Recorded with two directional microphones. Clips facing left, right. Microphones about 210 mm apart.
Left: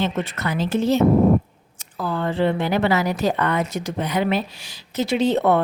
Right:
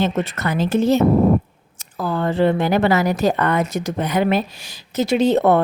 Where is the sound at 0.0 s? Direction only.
45° right (ahead or behind).